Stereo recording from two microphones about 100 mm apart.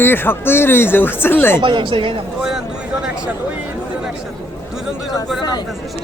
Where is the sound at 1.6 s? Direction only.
55° right (ahead or behind).